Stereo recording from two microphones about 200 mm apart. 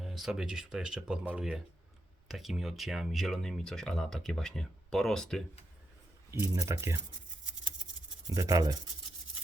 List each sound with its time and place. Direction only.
0.0 s speech: centre (ahead or behind)
6.3 s speech: 15° right (ahead or behind)
8.3 s speech: 15° right (ahead or behind)